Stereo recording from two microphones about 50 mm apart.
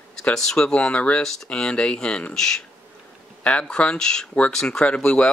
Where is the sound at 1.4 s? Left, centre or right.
Centre.